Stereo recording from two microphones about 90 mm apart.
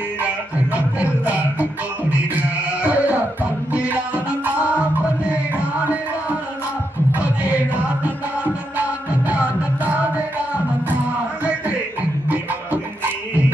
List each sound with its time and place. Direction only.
0.9 s music: 15° right (ahead or behind)
2.8 s a sound: 15° right (ahead or behind)
7.4 s music: 15° right (ahead or behind)